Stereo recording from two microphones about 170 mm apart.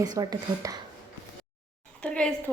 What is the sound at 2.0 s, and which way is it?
Speech, 5° left (ahead or behind).